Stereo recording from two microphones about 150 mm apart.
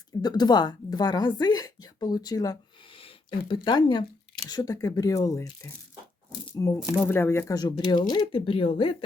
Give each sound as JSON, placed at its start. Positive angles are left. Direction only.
{"t": 0.2, "sound": "a woman's voice", "side_deg": 25}